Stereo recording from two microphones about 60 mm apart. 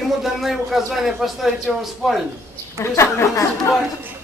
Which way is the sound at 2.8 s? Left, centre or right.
Left.